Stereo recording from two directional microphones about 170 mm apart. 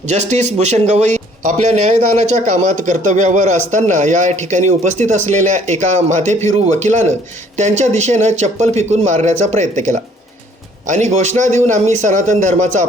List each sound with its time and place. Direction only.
0.1 s a man's voice: 40° right (ahead or behind)
7.5 s speech: 40° right (ahead or behind)